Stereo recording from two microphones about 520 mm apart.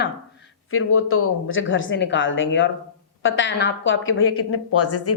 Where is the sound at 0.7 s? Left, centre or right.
Left.